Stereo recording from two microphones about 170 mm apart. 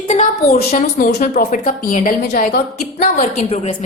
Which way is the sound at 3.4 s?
40° left (ahead or behind).